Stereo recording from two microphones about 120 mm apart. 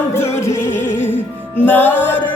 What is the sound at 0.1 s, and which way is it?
Music, 20° left (ahead or behind).